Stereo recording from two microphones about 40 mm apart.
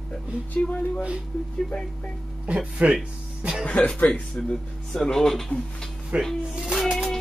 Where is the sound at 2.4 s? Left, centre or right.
Right.